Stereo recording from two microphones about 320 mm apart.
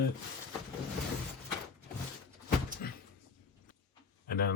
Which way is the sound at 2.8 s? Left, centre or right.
Left.